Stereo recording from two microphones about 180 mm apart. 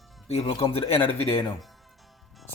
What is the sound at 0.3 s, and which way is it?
Speech, 35° left (ahead or behind).